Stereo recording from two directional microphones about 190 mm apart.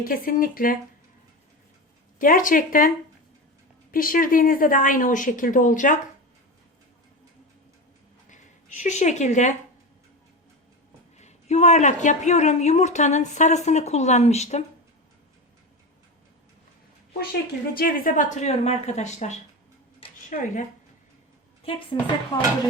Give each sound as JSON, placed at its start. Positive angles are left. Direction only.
{"t": 0.0, "sound": "a woman's voice", "side_deg": 45}
{"t": 2.1, "sound": "a woman's voice", "side_deg": 45}
{"t": 3.9, "sound": "a woman's voice", "side_deg": 45}
{"t": 8.3, "sound": "a woman's voice", "side_deg": 40}
{"t": 11.2, "sound": "a woman's voice", "side_deg": 35}
{"t": 17.7, "sound": "a woman's voice", "side_deg": 45}
{"t": 20.3, "sound": "a woman's voice", "side_deg": 40}
{"t": 21.9, "sound": "dishes", "side_deg": 20}